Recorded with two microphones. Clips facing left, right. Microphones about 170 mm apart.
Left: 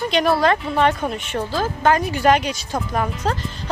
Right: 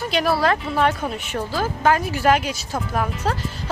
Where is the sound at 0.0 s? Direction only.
5° right (ahead or behind).